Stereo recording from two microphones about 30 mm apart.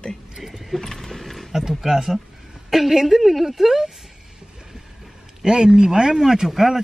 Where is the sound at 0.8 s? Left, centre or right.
Centre.